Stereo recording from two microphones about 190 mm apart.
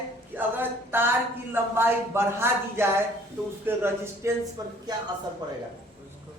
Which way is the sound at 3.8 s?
15° right (ahead or behind).